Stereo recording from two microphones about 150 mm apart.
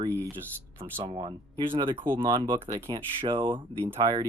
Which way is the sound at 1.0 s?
35° right (ahead or behind).